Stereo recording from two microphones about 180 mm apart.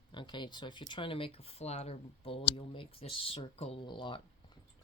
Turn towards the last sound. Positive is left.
turn(degrees=25)  # may be behind; listen again after turning